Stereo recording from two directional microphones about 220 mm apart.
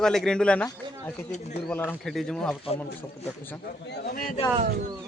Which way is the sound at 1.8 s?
Centre (ahead or behind).